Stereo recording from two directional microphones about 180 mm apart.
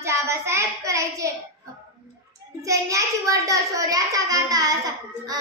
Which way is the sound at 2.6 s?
15° right (ahead or behind).